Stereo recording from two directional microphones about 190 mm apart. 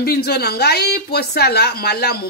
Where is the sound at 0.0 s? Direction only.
55° left (ahead or behind).